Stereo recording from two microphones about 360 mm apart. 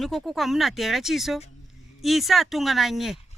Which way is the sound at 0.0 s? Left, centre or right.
Centre.